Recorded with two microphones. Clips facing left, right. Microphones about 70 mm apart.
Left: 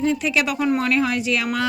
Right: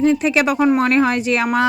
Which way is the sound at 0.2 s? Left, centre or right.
Right.